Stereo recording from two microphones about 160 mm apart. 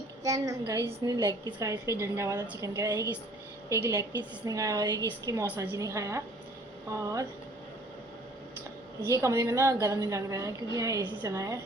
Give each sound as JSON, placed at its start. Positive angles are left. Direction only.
{"t": 0.2, "sound": "a woman's voice", "side_deg": -20}
{"t": 9.0, "sound": "a woman's voice", "side_deg": -20}